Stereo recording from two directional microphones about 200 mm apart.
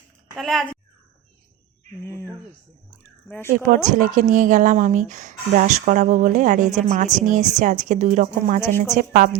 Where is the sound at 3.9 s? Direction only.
40° right (ahead or behind).